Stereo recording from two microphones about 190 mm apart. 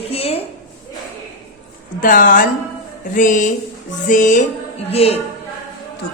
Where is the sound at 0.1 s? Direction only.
30° left (ahead or behind).